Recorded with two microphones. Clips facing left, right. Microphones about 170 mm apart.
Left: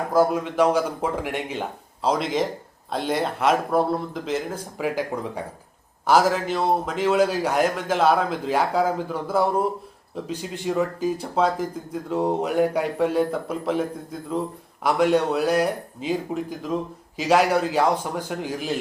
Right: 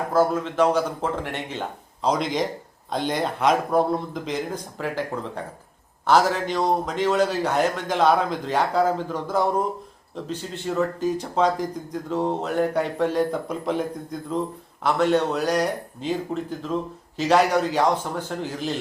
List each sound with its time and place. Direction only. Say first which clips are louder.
0.1 s speech: left 1 dB; 10° left (ahead or behind)